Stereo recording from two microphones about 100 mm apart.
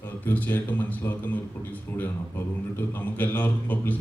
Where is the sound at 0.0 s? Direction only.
20° left (ahead or behind).